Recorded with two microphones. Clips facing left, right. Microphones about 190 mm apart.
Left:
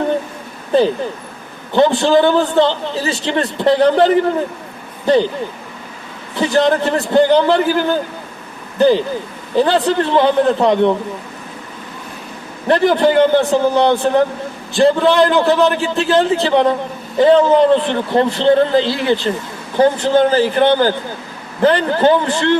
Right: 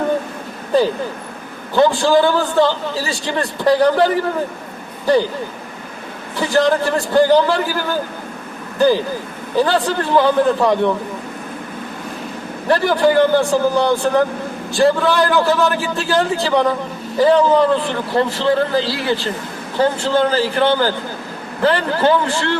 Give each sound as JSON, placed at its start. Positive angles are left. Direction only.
{"t": 1.7, "sound": "a man's voice", "side_deg": 20}
{"t": 6.3, "sound": "a man's voice", "side_deg": 20}
{"t": 8.8, "sound": "a man's voice", "side_deg": 20}
{"t": 12.6, "sound": "a man's voice", "side_deg": 20}